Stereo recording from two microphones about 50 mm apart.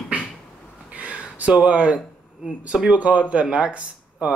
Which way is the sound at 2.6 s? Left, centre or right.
Right.